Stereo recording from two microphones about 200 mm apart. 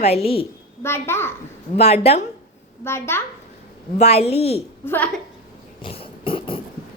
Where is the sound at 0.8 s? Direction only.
10° left (ahead or behind).